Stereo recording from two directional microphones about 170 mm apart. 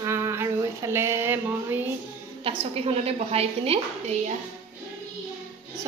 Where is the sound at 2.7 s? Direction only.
35° right (ahead or behind).